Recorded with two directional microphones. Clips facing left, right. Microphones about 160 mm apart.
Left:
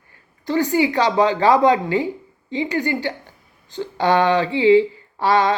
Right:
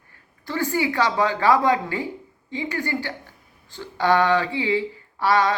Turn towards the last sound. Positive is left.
turn(degrees=20)  # may be behind; listen again after turning